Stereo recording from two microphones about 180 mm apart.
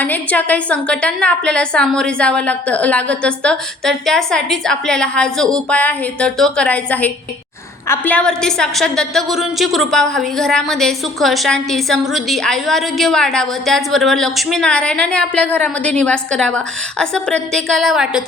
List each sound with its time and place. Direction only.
0.0 s a woman's voice: 10° left (ahead or behind)